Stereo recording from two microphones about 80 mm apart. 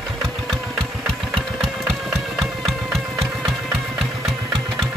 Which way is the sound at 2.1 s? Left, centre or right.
Centre.